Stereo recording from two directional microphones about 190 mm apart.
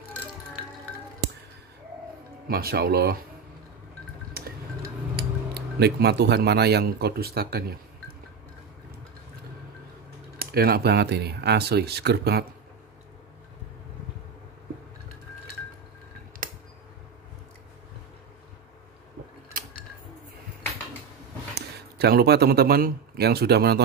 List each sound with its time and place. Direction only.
2.4 s speech: 55° right (ahead or behind)
5.1 s speech: 60° right (ahead or behind)
10.4 s speech: 55° right (ahead or behind)
16.4 s a sound: 45° right (ahead or behind)
21.5 s speech: 55° right (ahead or behind)